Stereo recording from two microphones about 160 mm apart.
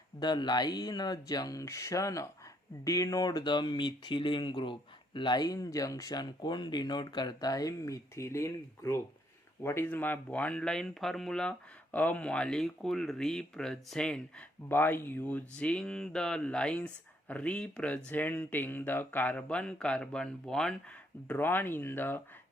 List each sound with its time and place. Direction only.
0.2 s speech: 25° left (ahead or behind)